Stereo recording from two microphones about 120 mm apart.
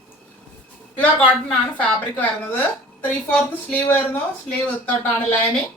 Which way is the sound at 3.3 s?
15° left (ahead or behind).